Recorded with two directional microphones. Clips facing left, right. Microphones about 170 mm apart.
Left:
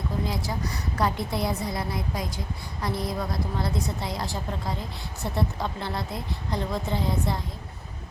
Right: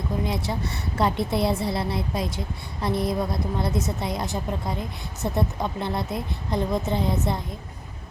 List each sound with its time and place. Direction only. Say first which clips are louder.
0.3 s a woman's voice: right 2 dB; 25° right (ahead or behind)